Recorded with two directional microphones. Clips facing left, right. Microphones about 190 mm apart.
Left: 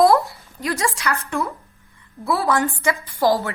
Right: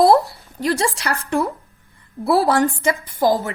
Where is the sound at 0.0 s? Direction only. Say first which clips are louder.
Right 2 dB; 30° right (ahead or behind).